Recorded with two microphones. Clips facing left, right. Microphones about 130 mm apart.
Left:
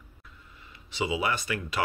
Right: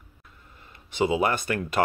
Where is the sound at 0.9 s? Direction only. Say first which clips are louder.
Right 5 dB; 50° right (ahead or behind).